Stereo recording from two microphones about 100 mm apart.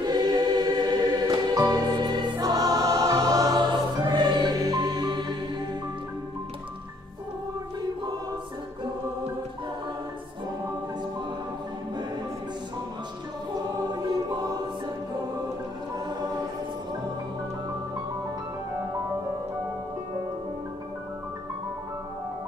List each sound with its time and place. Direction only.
0.0 s music: 45° right (ahead or behind)
13.9 s choir: 45° right (ahead or behind)